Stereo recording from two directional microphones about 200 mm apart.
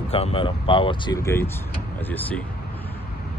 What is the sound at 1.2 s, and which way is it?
Speech, 10° left (ahead or behind).